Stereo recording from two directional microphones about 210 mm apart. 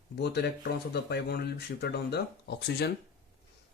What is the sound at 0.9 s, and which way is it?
Speech, 50° left (ahead or behind).